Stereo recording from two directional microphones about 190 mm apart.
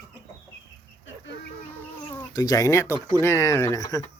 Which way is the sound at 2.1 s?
20° left (ahead or behind).